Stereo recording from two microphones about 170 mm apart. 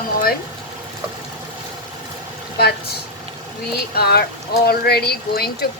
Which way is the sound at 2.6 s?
70° left (ahead or behind).